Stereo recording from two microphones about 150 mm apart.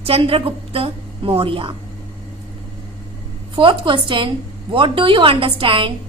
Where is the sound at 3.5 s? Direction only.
35° right (ahead or behind).